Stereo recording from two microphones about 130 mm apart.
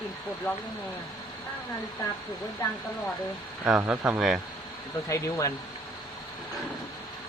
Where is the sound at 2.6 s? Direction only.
25° left (ahead or behind).